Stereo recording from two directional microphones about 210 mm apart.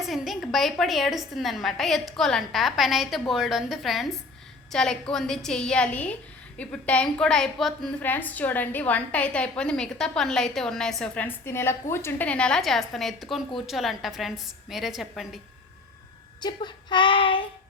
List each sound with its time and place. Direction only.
0.0 s a woman's voice: centre (ahead or behind)
16.4 s child singing: 20° left (ahead or behind)